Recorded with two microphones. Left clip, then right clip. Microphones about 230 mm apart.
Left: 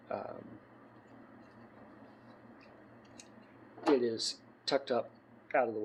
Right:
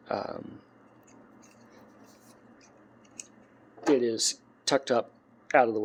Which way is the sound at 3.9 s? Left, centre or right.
Right.